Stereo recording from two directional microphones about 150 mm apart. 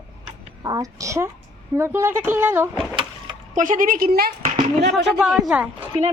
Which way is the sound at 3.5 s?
60° right (ahead or behind).